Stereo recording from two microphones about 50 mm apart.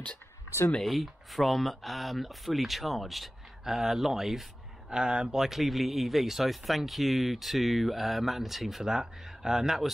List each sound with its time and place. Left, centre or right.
0.7 s speech: centre
4.9 s speech: centre